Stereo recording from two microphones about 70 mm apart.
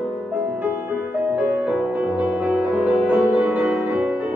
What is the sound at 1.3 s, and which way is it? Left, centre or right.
Music, right.